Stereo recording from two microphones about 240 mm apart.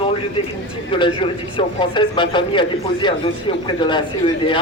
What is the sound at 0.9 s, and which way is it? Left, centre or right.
Speech, left.